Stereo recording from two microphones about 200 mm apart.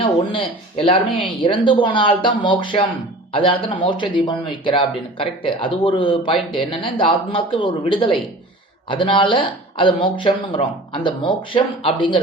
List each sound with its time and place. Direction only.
0.3 s speech: 25° left (ahead or behind)